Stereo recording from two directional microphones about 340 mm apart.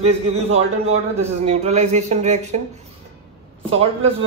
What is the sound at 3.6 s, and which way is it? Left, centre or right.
Speech, centre.